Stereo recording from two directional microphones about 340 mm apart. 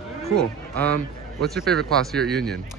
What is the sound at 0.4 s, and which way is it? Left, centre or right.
A man's voice, centre.